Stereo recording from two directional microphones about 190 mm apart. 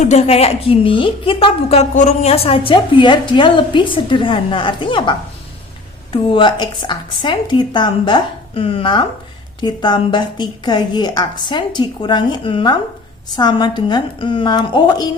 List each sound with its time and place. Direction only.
0.0 s a woman's voice: 35° left (ahead or behind)